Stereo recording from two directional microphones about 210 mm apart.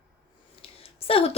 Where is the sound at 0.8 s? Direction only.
25° left (ahead or behind).